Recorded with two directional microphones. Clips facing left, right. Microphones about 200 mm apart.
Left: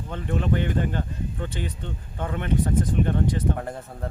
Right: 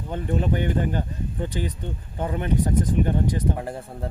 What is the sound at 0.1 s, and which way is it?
Speech, 15° right (ahead or behind).